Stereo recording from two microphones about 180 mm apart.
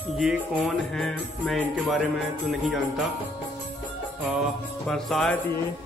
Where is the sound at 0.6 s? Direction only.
5° left (ahead or behind).